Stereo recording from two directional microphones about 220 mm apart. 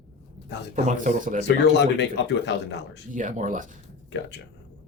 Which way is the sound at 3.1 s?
35° right (ahead or behind).